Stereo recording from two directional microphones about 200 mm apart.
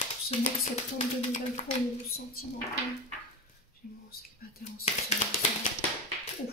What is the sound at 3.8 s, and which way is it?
Whispering, 45° left (ahead or behind).